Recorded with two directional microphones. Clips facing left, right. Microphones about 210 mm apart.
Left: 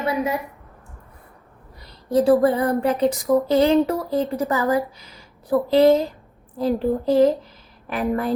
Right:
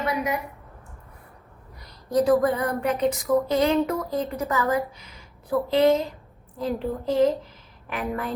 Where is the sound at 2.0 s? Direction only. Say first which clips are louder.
Left 4 dB; 30° left (ahead or behind).